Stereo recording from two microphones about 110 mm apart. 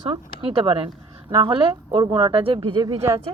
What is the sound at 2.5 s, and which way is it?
Speech, 45° right (ahead or behind).